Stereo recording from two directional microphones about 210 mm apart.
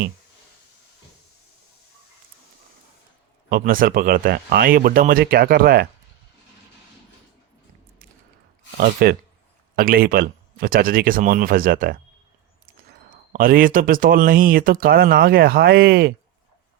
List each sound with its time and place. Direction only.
3.5 s speech: 40° right (ahead or behind)
8.8 s speech: 45° right (ahead or behind)